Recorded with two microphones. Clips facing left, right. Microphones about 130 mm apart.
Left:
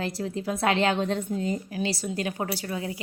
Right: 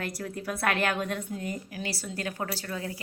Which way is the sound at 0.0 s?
25° left (ahead or behind).